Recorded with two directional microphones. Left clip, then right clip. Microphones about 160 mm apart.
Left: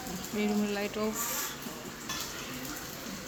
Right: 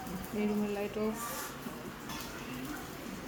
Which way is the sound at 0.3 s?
Centre (ahead or behind).